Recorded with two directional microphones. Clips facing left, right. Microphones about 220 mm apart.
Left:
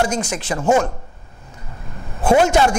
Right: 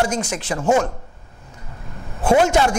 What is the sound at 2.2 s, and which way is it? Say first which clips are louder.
Chopping: left 1 dB; 25° left (ahead or behind).